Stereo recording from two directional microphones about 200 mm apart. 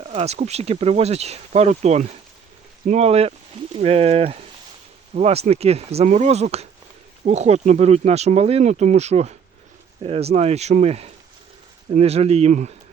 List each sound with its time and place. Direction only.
0.1 s speech: 30° right (ahead or behind)